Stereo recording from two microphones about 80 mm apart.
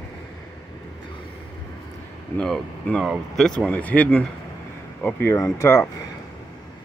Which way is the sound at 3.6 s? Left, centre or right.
Left.